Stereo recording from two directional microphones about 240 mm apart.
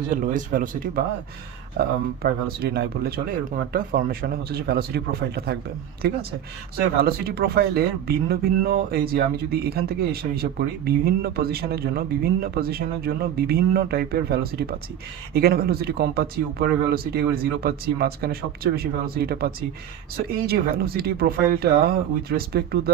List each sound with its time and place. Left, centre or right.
0.1 s speech: right